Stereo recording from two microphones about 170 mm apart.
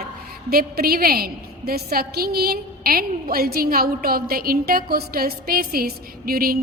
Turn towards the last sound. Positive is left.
turn(degrees=-60)  # may be behind; listen again after turning